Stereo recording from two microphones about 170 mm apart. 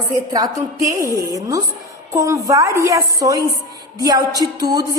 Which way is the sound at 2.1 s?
20° right (ahead or behind).